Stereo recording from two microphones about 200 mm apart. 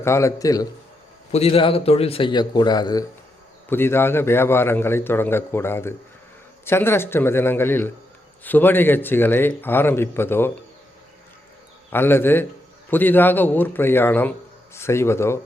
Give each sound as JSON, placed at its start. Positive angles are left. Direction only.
{"t": 0.0, "sound": "a man's voice", "side_deg": 15}
{"t": 1.3, "sound": "a man's voice", "side_deg": 30}
{"t": 11.9, "sound": "a man's voice", "side_deg": 10}